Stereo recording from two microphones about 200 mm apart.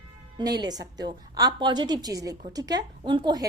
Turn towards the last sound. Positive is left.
turn(degrees=-20)  # may be behind; listen again after turning